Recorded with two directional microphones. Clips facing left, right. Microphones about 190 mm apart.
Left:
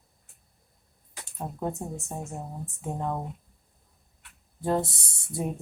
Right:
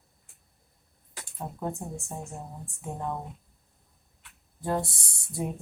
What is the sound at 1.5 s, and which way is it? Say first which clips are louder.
Speech: left 2 dB; 20° left (ahead or behind).